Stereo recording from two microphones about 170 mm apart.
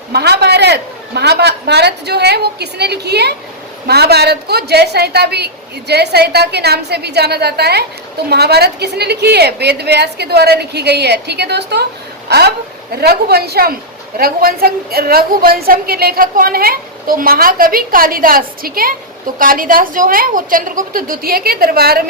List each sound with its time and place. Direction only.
0.1 s a woman's voice: 70° right (ahead or behind)
12.3 s a woman's voice: 70° right (ahead or behind)